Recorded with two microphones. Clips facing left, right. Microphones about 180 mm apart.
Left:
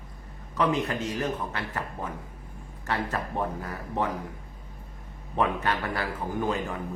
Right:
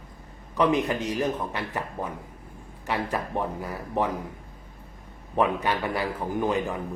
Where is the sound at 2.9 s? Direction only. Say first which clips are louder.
Right 2 dB; 15° right (ahead or behind).